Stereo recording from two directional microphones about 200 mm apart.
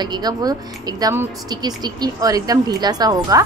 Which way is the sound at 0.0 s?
20° right (ahead or behind).